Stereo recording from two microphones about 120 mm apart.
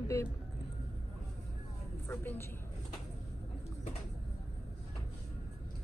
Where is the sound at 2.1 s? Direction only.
15° left (ahead or behind).